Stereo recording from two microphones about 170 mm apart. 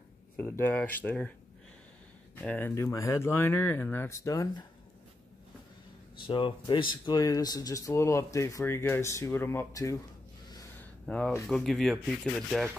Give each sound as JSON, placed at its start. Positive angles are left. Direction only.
{"t": 0.4, "sound": "speech", "side_deg": 10}
{"t": 2.4, "sound": "speech", "side_deg": 10}
{"t": 6.2, "sound": "speech", "side_deg": 30}
{"t": 10.8, "sound": "a sound", "side_deg": 5}
{"t": 11.4, "sound": "speech", "side_deg": 0}